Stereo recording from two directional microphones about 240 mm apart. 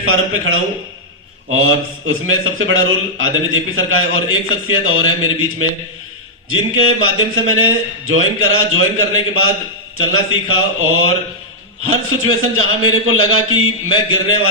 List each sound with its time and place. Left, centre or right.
0.0 s a man's voice: right
6.7 s a man's voice: right